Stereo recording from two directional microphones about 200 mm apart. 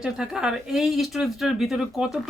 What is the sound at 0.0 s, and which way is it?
Speech, centre (ahead or behind).